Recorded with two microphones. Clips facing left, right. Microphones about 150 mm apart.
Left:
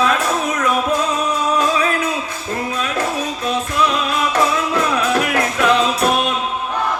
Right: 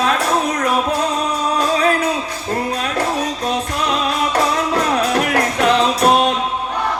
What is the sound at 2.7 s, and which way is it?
Music, 35° right (ahead or behind).